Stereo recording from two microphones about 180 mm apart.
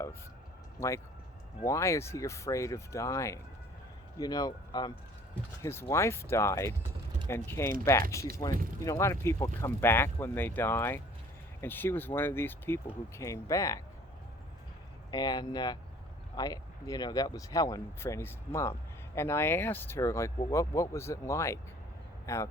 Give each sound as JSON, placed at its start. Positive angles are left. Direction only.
{"t": 0.8, "sound": "speech", "side_deg": 15}
{"t": 15.1, "sound": "speech", "side_deg": 20}